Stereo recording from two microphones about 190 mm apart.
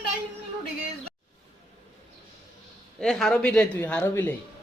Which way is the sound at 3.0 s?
5° left (ahead or behind).